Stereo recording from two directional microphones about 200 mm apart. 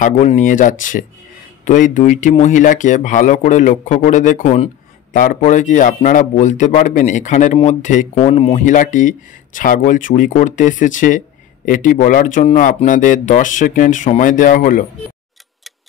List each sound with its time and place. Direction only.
0.0 s speech: 35° left (ahead or behind)
8.2 s speech: 25° left (ahead or behind)
8.6 s speech: 40° left (ahead or behind)